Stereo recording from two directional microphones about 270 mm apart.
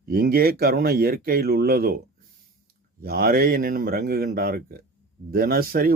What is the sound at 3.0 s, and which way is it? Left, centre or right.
Speech, right.